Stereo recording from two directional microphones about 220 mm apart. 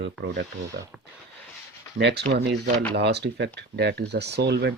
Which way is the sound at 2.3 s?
45° right (ahead or behind).